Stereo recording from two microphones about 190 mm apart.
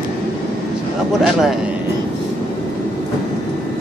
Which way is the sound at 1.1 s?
5° right (ahead or behind).